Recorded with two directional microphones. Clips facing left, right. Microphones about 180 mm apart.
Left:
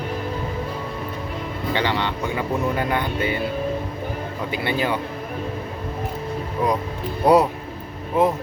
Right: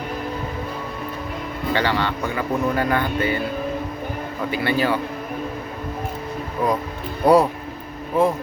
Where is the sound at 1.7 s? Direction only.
20° left (ahead or behind).